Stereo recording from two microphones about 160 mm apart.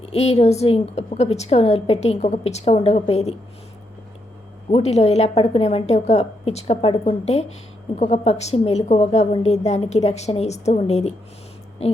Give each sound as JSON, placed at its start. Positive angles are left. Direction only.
{"t": 0.0, "sound": "a woman's voice", "side_deg": 40}
{"t": 4.7, "sound": "a woman's voice", "side_deg": 40}